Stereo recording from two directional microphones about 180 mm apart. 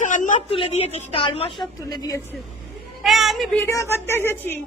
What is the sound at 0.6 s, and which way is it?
A woman's voice, 35° left (ahead or behind).